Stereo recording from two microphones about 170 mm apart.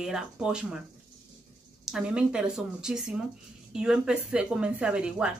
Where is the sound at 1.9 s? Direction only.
5° right (ahead or behind).